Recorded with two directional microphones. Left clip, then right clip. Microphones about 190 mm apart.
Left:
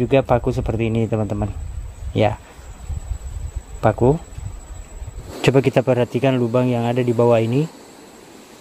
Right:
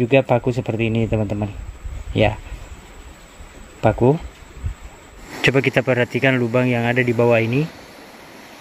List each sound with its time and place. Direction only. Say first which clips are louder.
0.0 s a man's voice: right 1 dB; centre (ahead or behind)
3.8 s a man's voice: even; centre (ahead or behind)
5.4 s speech: left 1 dB; 25° left (ahead or behind)